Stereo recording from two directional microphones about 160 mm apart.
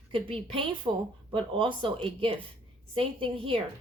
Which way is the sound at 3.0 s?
35° right (ahead or behind).